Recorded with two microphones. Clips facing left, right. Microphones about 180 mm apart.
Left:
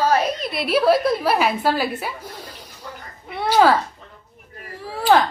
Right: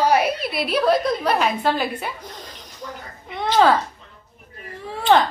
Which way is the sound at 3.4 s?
10° left (ahead or behind).